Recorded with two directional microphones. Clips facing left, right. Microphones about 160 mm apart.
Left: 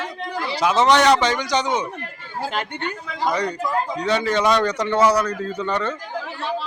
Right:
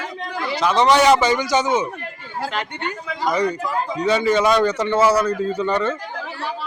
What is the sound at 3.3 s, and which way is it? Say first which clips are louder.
Speech: right 3 dB; 5° right (ahead or behind).